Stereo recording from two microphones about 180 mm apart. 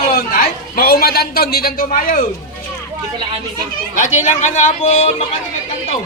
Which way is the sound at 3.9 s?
45° left (ahead or behind).